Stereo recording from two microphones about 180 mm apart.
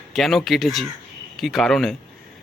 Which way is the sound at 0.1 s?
Centre (ahead or behind).